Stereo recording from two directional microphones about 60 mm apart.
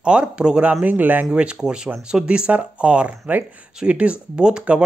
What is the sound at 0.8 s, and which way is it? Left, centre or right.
Speech, right.